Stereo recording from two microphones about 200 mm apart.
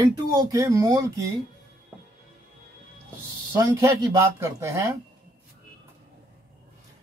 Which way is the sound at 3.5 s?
15° right (ahead or behind).